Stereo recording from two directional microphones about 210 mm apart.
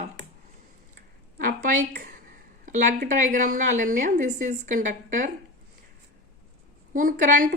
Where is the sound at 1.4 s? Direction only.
40° right (ahead or behind).